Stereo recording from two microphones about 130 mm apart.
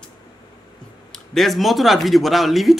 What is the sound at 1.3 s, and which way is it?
Speech, centre (ahead or behind).